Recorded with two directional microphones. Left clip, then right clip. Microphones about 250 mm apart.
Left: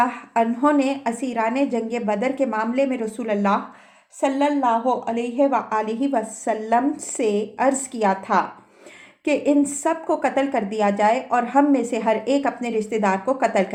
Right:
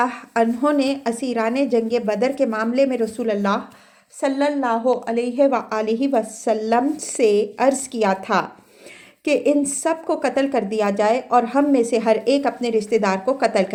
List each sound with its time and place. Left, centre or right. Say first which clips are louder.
0.0 s a woman's voice: even; right